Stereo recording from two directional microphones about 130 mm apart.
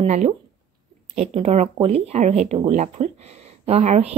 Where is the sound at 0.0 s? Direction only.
60° right (ahead or behind).